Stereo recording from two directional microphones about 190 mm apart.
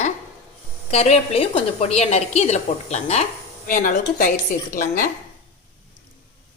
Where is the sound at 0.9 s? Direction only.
35° left (ahead or behind).